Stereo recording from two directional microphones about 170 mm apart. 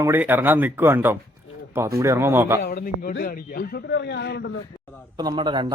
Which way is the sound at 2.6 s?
60° left (ahead or behind).